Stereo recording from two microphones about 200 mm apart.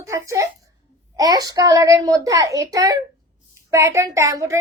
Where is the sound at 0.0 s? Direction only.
15° right (ahead or behind).